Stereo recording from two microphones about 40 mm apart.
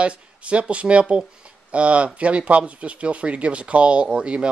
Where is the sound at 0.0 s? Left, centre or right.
Right.